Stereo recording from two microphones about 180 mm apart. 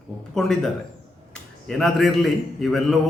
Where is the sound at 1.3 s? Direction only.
Centre (ahead or behind).